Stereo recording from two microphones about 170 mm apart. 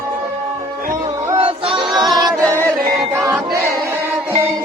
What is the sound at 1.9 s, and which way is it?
Singing, centre (ahead or behind).